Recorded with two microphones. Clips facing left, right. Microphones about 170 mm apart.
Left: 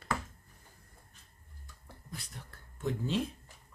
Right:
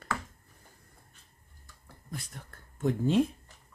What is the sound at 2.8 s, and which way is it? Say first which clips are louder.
Speech: right 7 dB; 50° right (ahead or behind).